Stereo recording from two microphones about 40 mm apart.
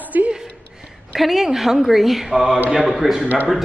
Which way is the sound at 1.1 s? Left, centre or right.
Centre.